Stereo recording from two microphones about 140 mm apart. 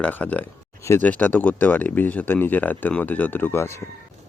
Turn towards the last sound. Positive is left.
turn(degrees=20)  # may be behind; listen again after turning